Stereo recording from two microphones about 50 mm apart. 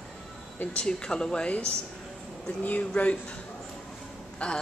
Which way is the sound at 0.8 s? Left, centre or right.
Centre.